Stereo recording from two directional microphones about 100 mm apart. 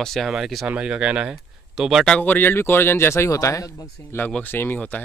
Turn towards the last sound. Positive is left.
turn(degrees=15)  # may be behind; listen again after turning